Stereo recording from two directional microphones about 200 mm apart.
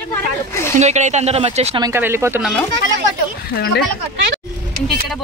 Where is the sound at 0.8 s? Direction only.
35° right (ahead or behind).